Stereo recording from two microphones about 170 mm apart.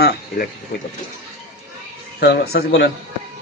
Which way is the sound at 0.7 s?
50° left (ahead or behind).